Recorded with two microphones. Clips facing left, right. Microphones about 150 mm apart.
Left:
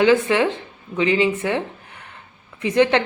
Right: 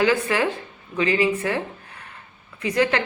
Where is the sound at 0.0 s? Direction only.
20° left (ahead or behind).